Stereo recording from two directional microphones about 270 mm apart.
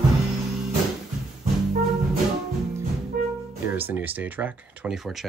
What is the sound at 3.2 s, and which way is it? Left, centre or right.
Music, right.